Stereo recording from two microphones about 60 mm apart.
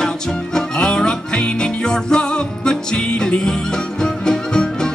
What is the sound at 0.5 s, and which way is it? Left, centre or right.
Music, centre.